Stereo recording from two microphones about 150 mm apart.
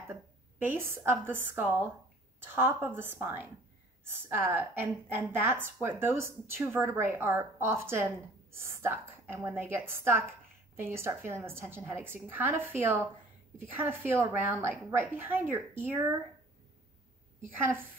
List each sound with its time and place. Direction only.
0.0 s a woman's voice: 15° right (ahead or behind)